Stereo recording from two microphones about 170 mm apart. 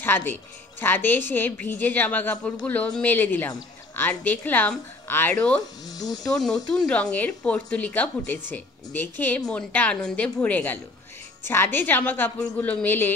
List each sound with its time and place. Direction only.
0.0 s a woman's voice: 10° left (ahead or behind)
5.6 s speech: 25° left (ahead or behind)
6.3 s a woman's voice: 5° left (ahead or behind)